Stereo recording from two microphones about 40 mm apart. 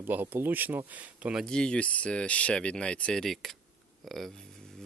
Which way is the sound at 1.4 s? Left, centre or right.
Left.